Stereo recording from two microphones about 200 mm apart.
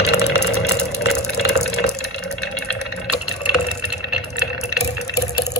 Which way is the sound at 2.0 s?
Centre (ahead or behind).